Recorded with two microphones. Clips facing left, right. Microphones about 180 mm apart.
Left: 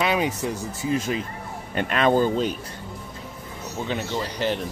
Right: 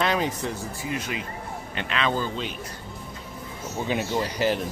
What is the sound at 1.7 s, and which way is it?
Speech, 45° left (ahead or behind).